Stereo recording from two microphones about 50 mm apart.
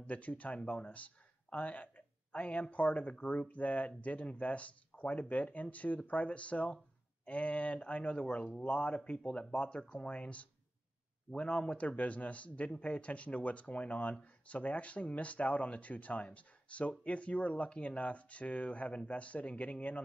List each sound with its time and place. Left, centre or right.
0.0 s speech: left